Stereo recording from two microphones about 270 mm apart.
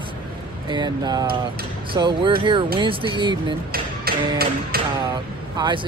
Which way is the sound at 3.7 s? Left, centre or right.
Right.